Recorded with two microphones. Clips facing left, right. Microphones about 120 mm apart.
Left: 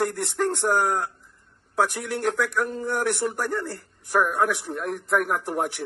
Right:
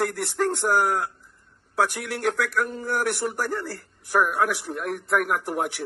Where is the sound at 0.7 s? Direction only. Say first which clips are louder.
Even; 35° left (ahead or behind).